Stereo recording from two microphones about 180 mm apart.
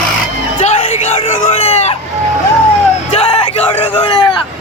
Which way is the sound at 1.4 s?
35° left (ahead or behind).